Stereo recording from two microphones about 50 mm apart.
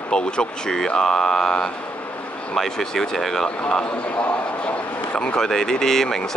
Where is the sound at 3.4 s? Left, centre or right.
Centre.